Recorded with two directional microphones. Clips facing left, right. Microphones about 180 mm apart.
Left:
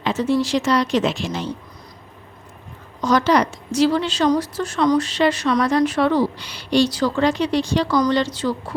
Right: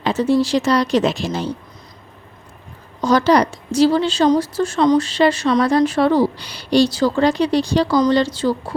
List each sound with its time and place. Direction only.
0.0 s a woman's voice: 35° right (ahead or behind)
3.0 s a woman's voice: 30° right (ahead or behind)